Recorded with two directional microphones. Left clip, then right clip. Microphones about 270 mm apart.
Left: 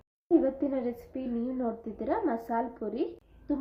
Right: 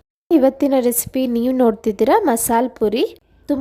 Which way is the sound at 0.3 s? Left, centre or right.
Right.